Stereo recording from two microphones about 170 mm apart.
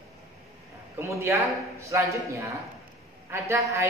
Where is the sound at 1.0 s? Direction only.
15° right (ahead or behind).